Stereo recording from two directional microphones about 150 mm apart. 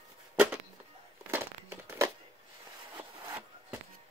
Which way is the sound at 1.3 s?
15° right (ahead or behind).